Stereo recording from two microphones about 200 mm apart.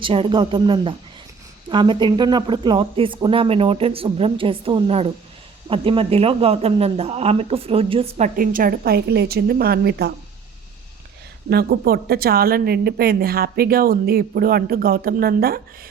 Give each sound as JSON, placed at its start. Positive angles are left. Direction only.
{"t": 0.0, "sound": "speech", "side_deg": -25}
{"t": 8.4, "sound": "speech", "side_deg": -45}
{"t": 11.4, "sound": "speech", "side_deg": -50}